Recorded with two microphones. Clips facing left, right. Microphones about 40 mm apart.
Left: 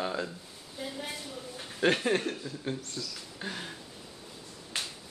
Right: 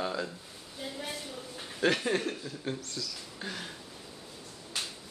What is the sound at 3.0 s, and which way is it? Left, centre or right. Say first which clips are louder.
Speech: even; left.